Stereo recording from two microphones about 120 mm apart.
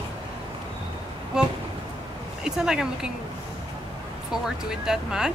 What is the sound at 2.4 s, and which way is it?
Speech, 5° right (ahead or behind).